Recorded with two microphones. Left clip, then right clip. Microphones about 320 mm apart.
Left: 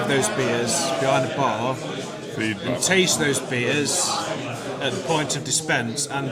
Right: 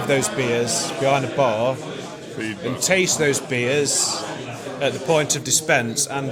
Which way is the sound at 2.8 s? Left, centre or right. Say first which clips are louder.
Right 2 dB; right.